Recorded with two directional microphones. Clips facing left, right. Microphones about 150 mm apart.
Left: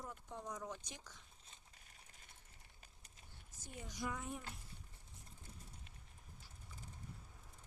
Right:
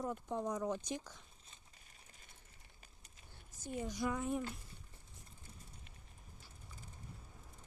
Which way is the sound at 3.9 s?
65° right (ahead or behind).